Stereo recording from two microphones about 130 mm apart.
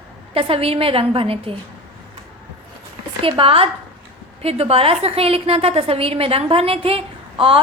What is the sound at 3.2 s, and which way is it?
A woman's voice, 45° right (ahead or behind).